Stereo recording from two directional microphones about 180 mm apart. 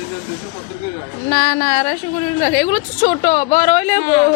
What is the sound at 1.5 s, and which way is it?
Speech, 40° left (ahead or behind).